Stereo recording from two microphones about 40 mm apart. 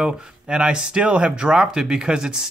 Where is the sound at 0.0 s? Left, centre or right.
Centre.